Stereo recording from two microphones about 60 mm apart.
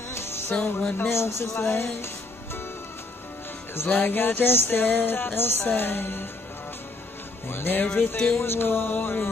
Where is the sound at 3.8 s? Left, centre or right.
Left.